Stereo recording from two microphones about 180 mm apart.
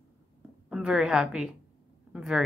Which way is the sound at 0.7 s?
5° right (ahead or behind).